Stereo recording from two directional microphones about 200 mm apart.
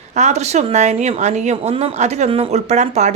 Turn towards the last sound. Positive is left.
turn(degrees=-35)  # may be behind; listen again after turning